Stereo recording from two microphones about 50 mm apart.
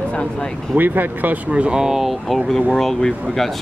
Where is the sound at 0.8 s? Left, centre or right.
Right.